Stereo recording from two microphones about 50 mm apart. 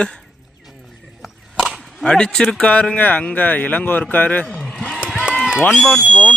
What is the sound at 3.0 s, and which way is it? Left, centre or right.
Speech, left.